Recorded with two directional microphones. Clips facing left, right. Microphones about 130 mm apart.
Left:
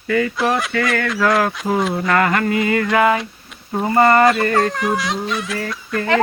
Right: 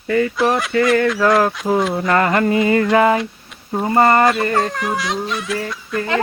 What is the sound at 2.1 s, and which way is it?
Mantra, 30° right (ahead or behind).